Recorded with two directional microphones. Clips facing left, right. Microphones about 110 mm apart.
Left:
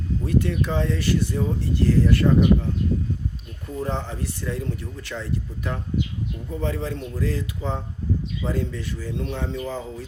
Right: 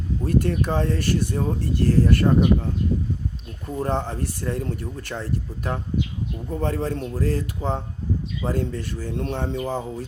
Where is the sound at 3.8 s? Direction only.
45° right (ahead or behind).